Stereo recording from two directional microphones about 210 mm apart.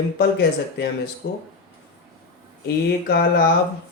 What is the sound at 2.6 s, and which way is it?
Speech, 50° left (ahead or behind).